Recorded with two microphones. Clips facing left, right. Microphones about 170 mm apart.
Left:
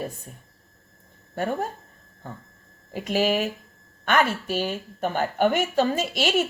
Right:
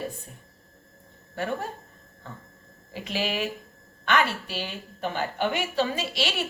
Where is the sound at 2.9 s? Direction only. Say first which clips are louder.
Left 7 dB; 45° left (ahead or behind).